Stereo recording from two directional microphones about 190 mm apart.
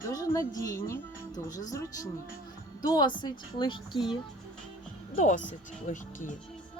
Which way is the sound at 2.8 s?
20° left (ahead or behind).